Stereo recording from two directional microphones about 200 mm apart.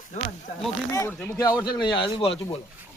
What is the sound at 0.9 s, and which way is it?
Speech, 15° left (ahead or behind).